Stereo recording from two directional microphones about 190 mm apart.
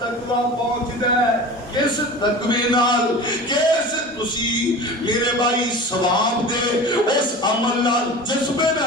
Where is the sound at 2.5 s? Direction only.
25° left (ahead or behind).